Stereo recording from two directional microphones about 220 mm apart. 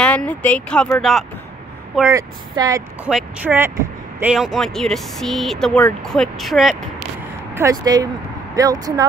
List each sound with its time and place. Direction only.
0.0 s speech: 5° left (ahead or behind)
2.0 s speech: 15° right (ahead or behind)
7.5 s speech: 15° right (ahead or behind)